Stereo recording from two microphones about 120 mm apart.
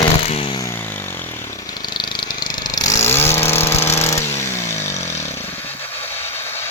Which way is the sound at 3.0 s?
20° left (ahead or behind).